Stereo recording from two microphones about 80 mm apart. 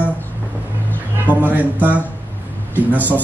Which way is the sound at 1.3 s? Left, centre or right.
Right.